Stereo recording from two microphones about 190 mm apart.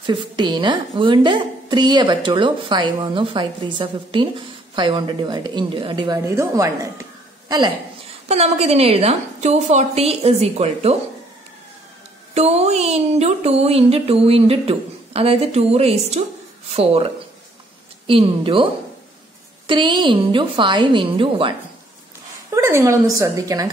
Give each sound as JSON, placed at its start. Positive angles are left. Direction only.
{"t": 0.0, "sound": "a woman's voice", "side_deg": -25}
{"t": 8.3, "sound": "speech", "side_deg": -35}
{"t": 12.4, "sound": "a woman's voice", "side_deg": -35}
{"t": 22.5, "sound": "speech", "side_deg": -15}